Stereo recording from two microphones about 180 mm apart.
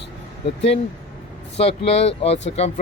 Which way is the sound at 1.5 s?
35° left (ahead or behind).